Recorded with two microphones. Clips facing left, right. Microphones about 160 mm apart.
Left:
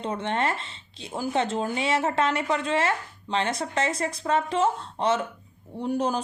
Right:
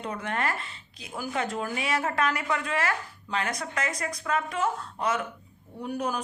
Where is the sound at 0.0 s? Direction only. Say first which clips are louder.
Left 4 dB; 25° left (ahead or behind).